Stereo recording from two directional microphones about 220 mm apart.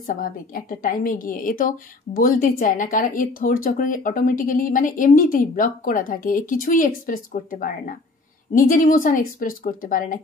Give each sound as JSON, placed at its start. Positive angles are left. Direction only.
{"t": 0.0, "sound": "a woman's voice", "side_deg": 40}